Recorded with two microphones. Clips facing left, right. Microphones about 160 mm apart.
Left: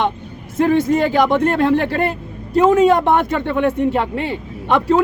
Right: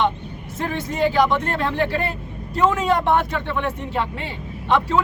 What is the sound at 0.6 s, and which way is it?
Speech, 50° left (ahead or behind).